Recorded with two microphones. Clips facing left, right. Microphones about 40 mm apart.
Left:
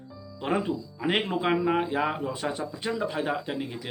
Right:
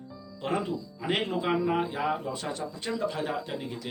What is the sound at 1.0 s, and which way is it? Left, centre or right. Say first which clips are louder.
Speech: left 3 dB; left.